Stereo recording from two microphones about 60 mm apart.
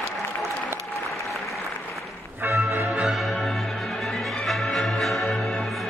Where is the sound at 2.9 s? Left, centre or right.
Right.